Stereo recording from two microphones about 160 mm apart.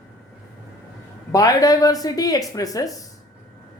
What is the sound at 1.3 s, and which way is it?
Speech, 20° left (ahead or behind).